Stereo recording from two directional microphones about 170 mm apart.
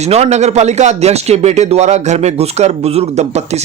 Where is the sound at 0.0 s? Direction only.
40° right (ahead or behind).